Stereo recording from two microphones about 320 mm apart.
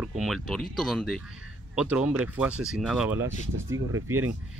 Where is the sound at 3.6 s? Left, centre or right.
Right.